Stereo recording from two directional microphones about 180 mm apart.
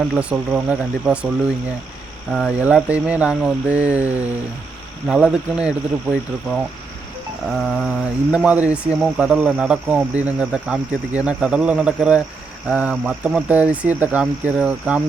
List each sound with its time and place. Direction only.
0.2 s speech: 5° right (ahead or behind)
2.3 s speech: 5° right (ahead or behind)